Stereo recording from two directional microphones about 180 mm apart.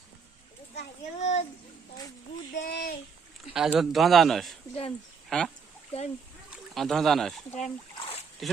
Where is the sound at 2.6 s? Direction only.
55° left (ahead or behind).